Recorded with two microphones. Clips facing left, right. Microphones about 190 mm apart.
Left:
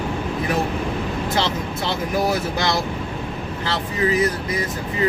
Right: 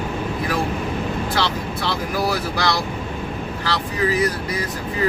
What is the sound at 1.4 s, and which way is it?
Speech, 20° left (ahead or behind).